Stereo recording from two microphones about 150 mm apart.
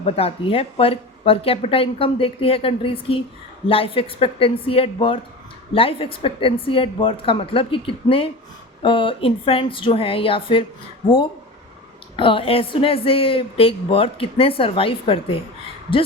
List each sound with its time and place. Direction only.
0.0 s speech: 40° left (ahead or behind)
12.1 s speech: 35° left (ahead or behind)